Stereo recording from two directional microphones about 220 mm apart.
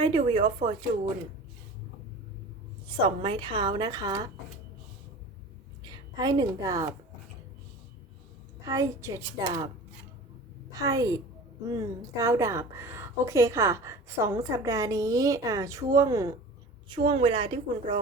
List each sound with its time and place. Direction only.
0.0 s speech: 25° right (ahead or behind)
2.8 s speech: 20° right (ahead or behind)
5.8 s a woman's voice: 20° right (ahead or behind)
8.6 s a woman's voice: 15° right (ahead or behind)
10.7 s a woman's voice: 15° right (ahead or behind)